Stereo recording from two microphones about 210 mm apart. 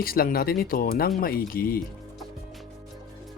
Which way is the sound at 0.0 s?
45° left (ahead or behind).